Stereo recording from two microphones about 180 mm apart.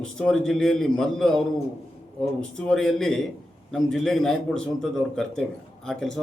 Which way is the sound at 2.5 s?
5° left (ahead or behind).